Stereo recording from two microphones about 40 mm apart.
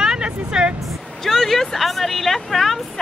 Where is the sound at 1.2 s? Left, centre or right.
Centre.